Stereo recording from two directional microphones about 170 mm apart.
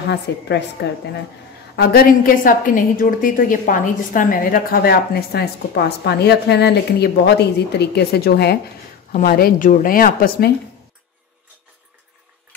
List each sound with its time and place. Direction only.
0.3 s a woman's voice: 85° left
1.8 s a woman's voice: 60° left (ahead or behind)